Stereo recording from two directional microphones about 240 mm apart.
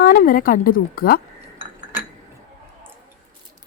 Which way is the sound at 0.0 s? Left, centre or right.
Left.